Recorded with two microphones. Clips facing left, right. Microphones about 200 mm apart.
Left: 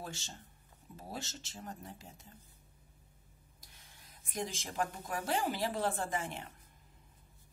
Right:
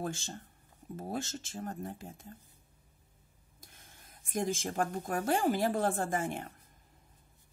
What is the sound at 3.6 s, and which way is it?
Speech, 50° right (ahead or behind).